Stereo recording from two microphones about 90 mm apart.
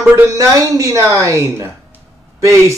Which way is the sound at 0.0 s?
35° right (ahead or behind).